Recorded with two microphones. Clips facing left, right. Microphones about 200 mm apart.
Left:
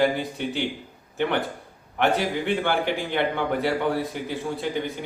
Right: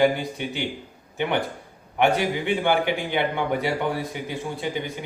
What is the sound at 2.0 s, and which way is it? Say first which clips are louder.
A man's voice: right 1 dB; centre (ahead or behind).